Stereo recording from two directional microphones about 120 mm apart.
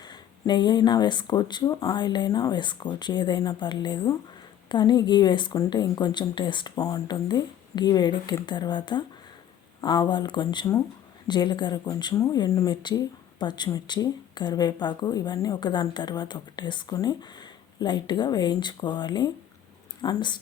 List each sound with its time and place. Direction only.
0.0 s speech: 35° left (ahead or behind)